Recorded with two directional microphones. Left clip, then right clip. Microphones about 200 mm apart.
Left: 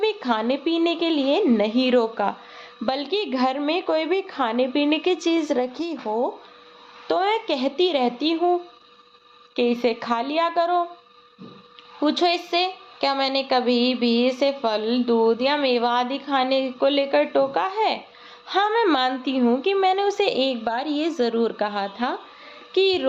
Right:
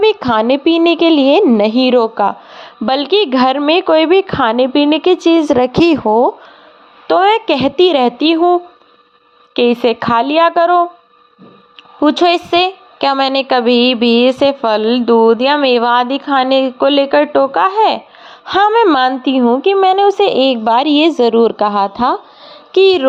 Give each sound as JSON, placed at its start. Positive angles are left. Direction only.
{"t": 0.0, "sound": "a woman's voice", "side_deg": -40}
{"t": 9.6, "sound": "a woman's voice", "side_deg": -40}
{"t": 11.9, "sound": "a woman's voice", "side_deg": -35}